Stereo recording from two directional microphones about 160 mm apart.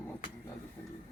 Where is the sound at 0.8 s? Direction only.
15° left (ahead or behind).